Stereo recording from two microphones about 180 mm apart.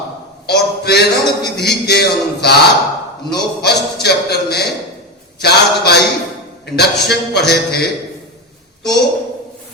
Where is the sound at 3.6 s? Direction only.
65° left (ahead or behind).